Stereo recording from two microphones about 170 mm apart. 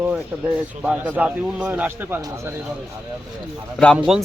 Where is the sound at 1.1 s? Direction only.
10° right (ahead or behind).